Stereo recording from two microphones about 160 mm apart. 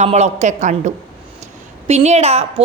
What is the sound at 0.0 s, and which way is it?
A woman's voice, 45° right (ahead or behind).